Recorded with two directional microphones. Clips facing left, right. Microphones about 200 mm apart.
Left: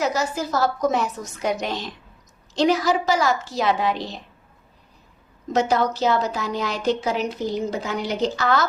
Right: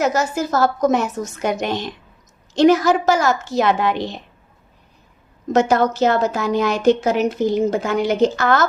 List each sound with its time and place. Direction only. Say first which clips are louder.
0.0 s a woman's voice: right 4 dB; 45° right (ahead or behind)
5.5 s a woman's voice: right 5 dB; 50° right (ahead or behind)